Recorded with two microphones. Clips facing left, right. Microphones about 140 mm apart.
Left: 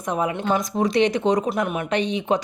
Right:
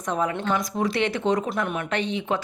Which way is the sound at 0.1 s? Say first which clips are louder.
Left 2 dB; 15° left (ahead or behind).